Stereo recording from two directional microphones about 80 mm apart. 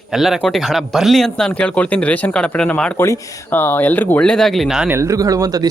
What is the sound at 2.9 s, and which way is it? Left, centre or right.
Speech, left.